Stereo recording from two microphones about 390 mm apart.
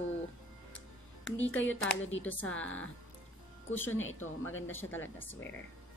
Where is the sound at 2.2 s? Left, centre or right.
Centre.